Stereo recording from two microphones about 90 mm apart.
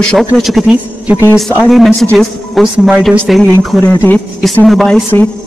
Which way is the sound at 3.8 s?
20° left (ahead or behind).